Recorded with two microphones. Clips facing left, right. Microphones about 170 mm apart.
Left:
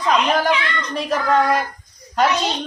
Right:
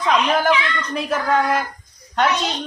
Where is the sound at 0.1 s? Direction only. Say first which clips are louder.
Even; 5° right (ahead or behind).